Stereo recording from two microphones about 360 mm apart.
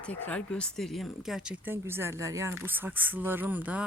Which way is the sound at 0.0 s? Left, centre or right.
Centre.